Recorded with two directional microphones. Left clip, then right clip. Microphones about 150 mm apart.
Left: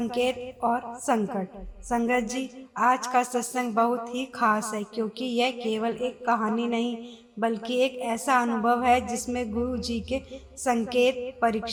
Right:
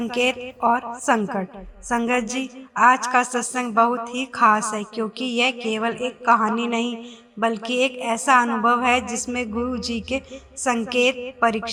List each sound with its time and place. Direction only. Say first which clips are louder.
0.0 s a woman's voice: right 4 dB; 20° right (ahead or behind)